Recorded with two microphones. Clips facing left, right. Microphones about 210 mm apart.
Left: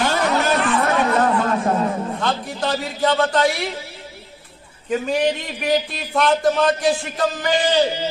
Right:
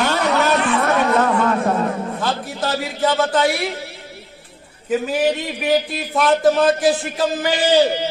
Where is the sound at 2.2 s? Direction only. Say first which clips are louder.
Even; 5° right (ahead or behind).